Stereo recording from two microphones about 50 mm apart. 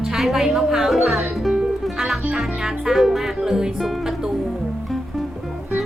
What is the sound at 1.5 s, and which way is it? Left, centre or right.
Music, centre.